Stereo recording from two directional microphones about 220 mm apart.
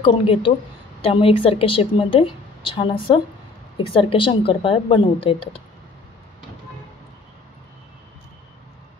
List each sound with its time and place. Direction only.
0.0 s a woman's voice: 20° left (ahead or behind)